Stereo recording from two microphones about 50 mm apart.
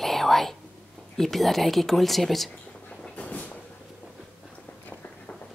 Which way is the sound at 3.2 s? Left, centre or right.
Left.